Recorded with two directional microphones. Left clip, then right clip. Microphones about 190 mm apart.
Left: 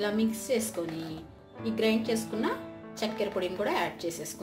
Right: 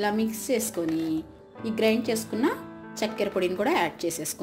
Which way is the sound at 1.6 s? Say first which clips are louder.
Right 4 dB; 40° right (ahead or behind).